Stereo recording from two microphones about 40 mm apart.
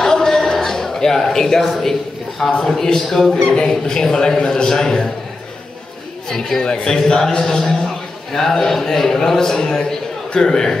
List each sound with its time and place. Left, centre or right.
0.0 s a sound: centre
2.6 s a man's voice: centre
6.2 s speech: centre
6.6 s a man's voice: left